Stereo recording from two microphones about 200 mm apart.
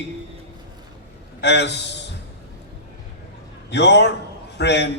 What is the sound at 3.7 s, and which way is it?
A man's voice, 60° left (ahead or behind).